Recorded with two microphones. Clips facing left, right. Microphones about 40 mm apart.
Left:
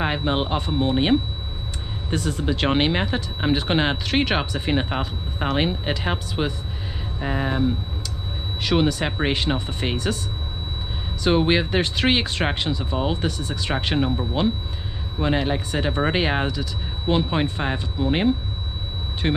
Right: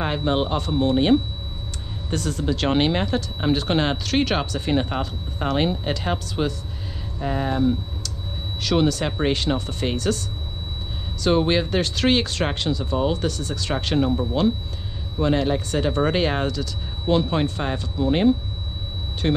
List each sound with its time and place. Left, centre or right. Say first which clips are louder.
0.0 s speech: right 1 dB; centre
11.2 s speech: even; centre